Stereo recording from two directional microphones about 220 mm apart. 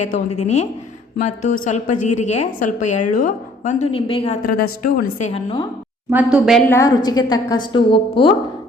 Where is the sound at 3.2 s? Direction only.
35° left (ahead or behind).